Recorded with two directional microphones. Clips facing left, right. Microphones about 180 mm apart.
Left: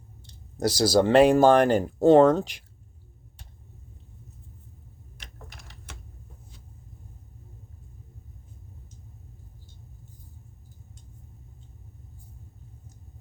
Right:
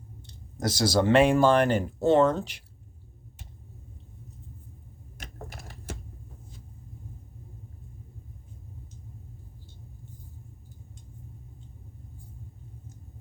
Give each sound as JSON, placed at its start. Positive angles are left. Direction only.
{"t": 0.6, "sound": "speech", "side_deg": 35}